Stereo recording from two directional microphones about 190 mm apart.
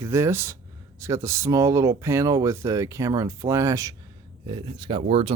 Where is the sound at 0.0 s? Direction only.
15° right (ahead or behind).